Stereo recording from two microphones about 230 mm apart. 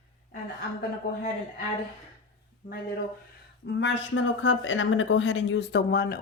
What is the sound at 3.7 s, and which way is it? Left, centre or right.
Speech, left.